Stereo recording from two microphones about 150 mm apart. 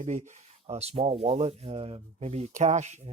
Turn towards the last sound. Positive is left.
turn(degrees=-50)  # may be behind; listen again after turning